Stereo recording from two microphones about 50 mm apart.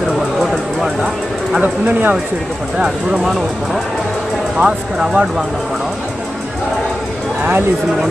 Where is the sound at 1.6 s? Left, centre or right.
Right.